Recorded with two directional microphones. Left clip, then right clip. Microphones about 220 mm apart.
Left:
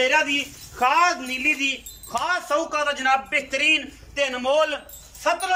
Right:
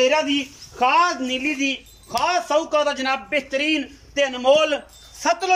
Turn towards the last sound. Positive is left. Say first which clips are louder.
# right 2 dB
turn(degrees=-30)  # may be behind; listen again after turning